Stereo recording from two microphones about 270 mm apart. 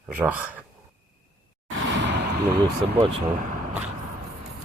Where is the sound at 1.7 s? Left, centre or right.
Right.